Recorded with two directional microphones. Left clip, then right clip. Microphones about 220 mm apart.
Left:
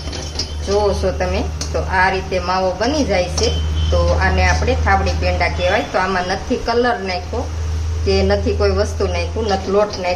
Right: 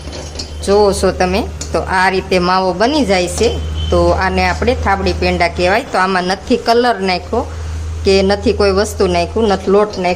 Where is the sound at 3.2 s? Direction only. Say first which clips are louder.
Right 5 dB; centre (ahead or behind).